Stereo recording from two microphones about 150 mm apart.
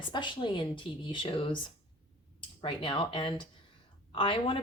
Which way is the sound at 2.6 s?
35° left (ahead or behind).